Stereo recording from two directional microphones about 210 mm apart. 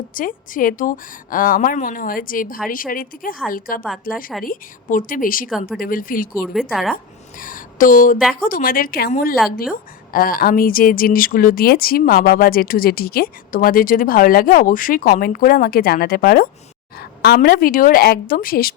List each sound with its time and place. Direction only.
0.1 s a woman's voice: 40° left (ahead or behind)
6.5 s a woman's voice: centre (ahead or behind)
6.9 s a sound: 40° left (ahead or behind)
8.4 s speech: 40° left (ahead or behind)